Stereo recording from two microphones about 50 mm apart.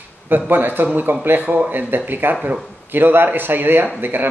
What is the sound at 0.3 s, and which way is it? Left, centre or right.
Speech, right.